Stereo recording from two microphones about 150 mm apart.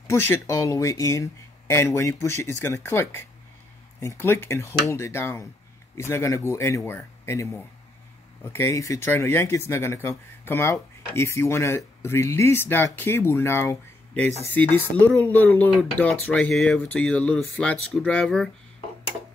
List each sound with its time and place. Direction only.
0.0 s speech: 15° left (ahead or behind)